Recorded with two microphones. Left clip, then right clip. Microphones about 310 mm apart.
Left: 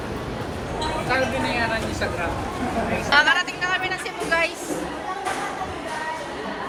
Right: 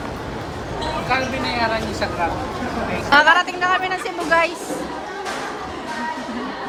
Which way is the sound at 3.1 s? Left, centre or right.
Right.